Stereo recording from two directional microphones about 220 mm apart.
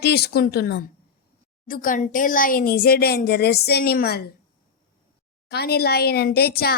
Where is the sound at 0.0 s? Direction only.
45° left (ahead or behind).